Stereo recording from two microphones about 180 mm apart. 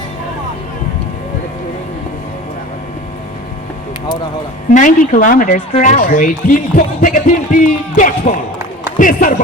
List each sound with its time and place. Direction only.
4.7 s speech: 45° left (ahead or behind)